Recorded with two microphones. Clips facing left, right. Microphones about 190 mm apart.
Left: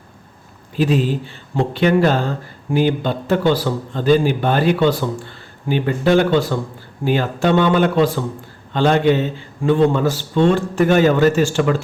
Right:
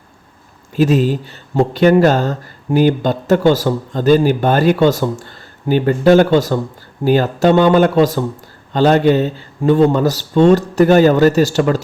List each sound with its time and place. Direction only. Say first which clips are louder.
0.8 s a man's voice: right 4 dB; 45° right (ahead or behind)